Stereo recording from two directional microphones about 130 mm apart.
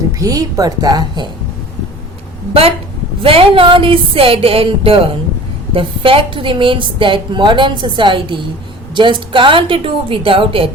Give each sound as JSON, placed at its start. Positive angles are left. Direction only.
{"t": 0.2, "sound": "a woman's voice", "side_deg": -30}
{"t": 2.5, "sound": "a woman's voice", "side_deg": -45}